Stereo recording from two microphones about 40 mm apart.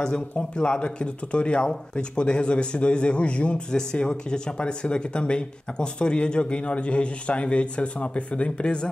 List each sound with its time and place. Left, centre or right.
0.0 s speech: left